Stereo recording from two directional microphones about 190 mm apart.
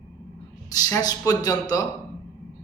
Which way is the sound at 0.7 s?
20° left (ahead or behind).